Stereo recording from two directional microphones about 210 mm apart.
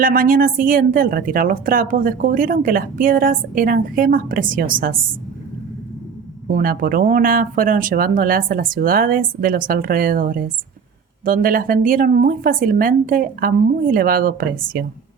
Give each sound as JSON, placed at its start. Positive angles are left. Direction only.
{"t": 0.0, "sound": "a woman's voice", "side_deg": -40}
{"t": 6.5, "sound": "a woman's voice", "side_deg": -40}